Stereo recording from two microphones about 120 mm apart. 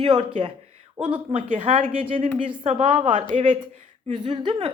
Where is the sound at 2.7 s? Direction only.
75° right (ahead or behind).